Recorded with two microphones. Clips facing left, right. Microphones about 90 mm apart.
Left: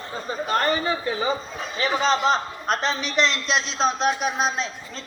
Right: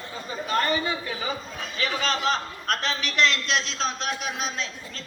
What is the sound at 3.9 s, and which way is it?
Speech, 40° left (ahead or behind).